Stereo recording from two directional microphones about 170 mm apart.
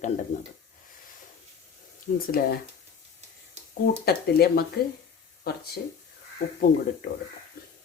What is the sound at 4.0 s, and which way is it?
Speech, 65° left (ahead or behind).